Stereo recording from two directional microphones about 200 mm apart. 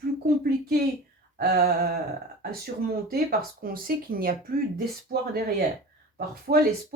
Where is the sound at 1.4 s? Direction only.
50° right (ahead or behind).